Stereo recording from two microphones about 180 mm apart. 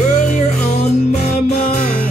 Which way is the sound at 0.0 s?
40° left (ahead or behind).